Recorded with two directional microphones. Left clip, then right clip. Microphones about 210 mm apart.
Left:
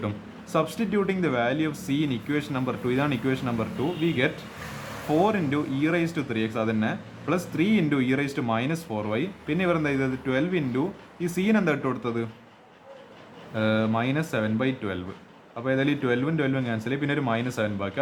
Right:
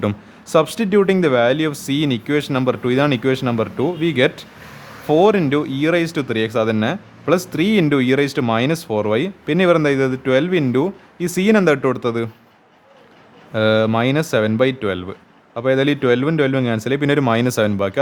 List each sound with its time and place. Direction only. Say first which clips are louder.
0.5 s speech: right 10 dB; 45° right (ahead or behind)
13.5 s speech: right 10 dB; 45° right (ahead or behind)